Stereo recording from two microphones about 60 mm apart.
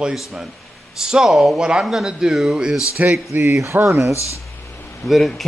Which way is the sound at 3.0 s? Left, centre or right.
Right.